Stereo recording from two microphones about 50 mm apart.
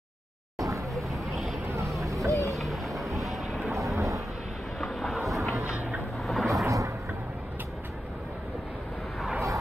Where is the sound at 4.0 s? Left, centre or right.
Right.